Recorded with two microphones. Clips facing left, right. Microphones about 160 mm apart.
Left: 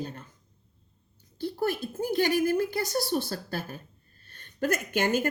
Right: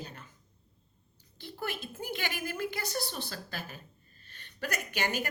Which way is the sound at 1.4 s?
40° left (ahead or behind).